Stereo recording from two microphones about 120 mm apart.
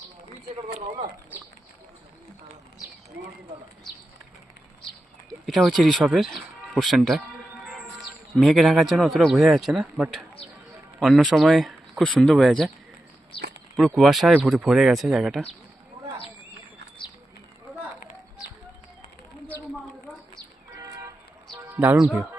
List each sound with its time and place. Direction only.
5.5 s a man's voice: centre (ahead or behind)
7.6 s music: centre (ahead or behind)
8.4 s a man's voice: centre (ahead or behind)
13.7 s a man's voice: centre (ahead or behind)
17.0 s a sound: 45° left (ahead or behind)
20.7 s vehicle: 30° right (ahead or behind)
21.6 s music: 15° right (ahead or behind)
21.9 s a man's voice: 5° right (ahead or behind)